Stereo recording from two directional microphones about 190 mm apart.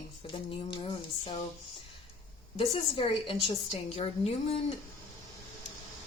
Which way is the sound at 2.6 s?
30° left (ahead or behind).